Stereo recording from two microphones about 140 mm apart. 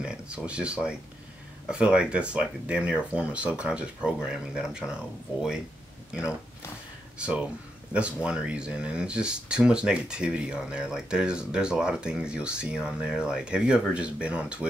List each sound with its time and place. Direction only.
0.0 s speech: 5° right (ahead or behind)
7.2 s speech: 10° right (ahead or behind)